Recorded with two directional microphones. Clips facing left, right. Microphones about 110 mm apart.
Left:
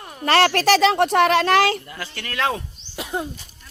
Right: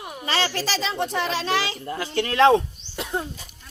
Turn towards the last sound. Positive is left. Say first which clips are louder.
# left 1 dB
turn(degrees=5)  # may be behind; listen again after turning